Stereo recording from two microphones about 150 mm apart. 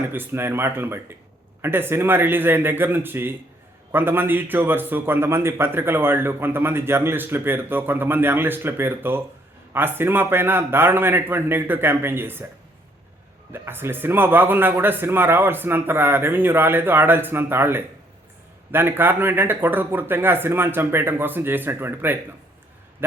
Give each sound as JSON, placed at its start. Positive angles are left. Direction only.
{"t": 0.1, "sound": "a man's voice", "side_deg": -15}
{"t": 13.5, "sound": "a man's voice", "side_deg": -15}